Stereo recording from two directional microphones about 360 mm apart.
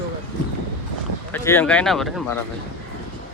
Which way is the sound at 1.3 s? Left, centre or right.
Centre.